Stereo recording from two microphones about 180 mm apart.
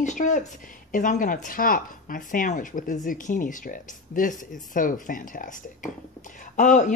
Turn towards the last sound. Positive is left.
turn(degrees=45)  # may be behind; listen again after turning